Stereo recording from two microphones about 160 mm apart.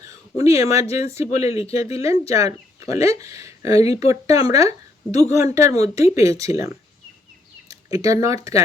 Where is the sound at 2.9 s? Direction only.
20° right (ahead or behind).